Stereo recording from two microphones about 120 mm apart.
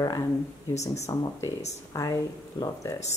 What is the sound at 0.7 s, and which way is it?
Speech, 70° left (ahead or behind).